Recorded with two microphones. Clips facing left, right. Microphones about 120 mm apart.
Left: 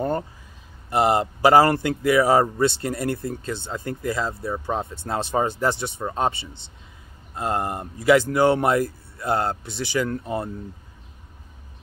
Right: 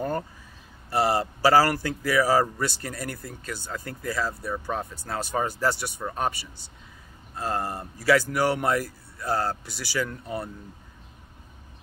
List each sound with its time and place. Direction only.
0.8 s speech: 20° left (ahead or behind)
10.0 s speech: 45° left (ahead or behind)